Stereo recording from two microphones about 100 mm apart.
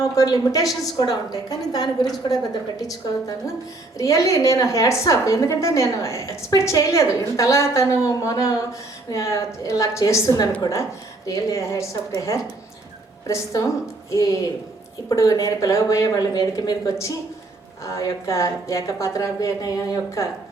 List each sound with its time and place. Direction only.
0.2 s a woman's voice: 35° left (ahead or behind)